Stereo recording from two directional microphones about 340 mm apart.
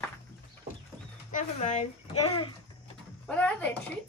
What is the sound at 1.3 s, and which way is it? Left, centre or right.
Speech, centre.